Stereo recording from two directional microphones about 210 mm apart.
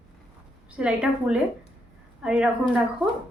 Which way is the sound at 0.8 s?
5° right (ahead or behind).